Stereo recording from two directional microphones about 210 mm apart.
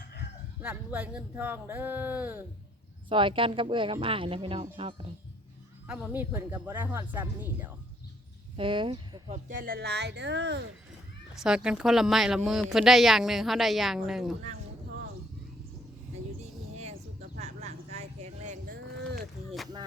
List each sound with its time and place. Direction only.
0.6 s speech: 5° right (ahead or behind)
3.1 s speech: 25° right (ahead or behind)
5.9 s speech: 5° right (ahead or behind)
8.5 s speech: 25° right (ahead or behind)
9.3 s speech: 40° right (ahead or behind); by 10.7 s 55° right (ahead or behind)
11.3 s speech: 5° right (ahead or behind)
16.4 s a sound: 30° right (ahead or behind)